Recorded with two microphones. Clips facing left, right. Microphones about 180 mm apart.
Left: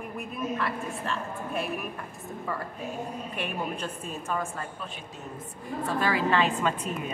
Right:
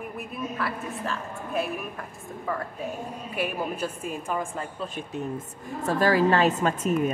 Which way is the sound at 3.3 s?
5° right (ahead or behind).